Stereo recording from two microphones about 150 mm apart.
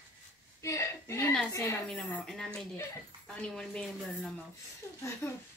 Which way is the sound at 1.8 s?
5° left (ahead or behind).